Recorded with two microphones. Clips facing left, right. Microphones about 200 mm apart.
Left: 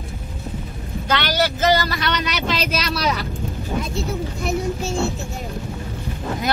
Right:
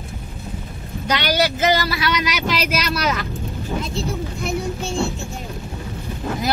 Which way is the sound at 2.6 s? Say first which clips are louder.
Right 1 dB; 30° left (ahead or behind).